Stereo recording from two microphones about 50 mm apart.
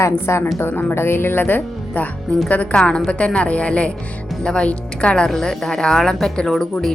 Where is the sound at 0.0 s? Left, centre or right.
Left.